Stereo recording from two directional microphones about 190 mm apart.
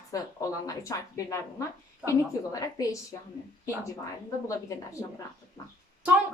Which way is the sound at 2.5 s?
20° left (ahead or behind).